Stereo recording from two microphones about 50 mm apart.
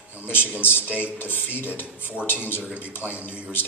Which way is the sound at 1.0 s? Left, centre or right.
Left.